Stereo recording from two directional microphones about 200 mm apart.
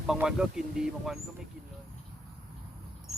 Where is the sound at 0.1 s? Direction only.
5° right (ahead or behind).